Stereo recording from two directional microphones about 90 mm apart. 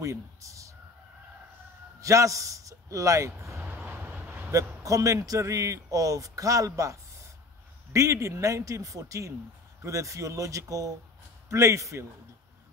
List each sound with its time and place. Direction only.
0.0 s a man's voice: 35° right (ahead or behind)
2.0 s a sound: 35° right (ahead or behind)
3.6 s vehicle: 20° right (ahead or behind)
4.8 s speech: 35° right (ahead or behind)